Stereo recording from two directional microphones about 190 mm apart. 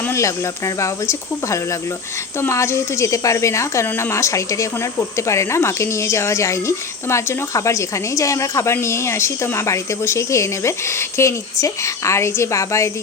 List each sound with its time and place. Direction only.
0.0 s speech: 15° left (ahead or behind)